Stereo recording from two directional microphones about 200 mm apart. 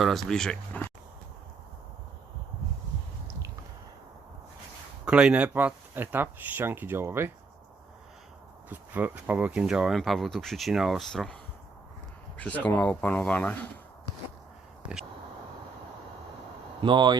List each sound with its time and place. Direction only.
0.0 s speech: centre (ahead or behind)
5.0 s speech: 5° right (ahead or behind)
8.7 s speech: 10° right (ahead or behind)
12.4 s speech: 5° left (ahead or behind)
16.8 s speech: 20° right (ahead or behind)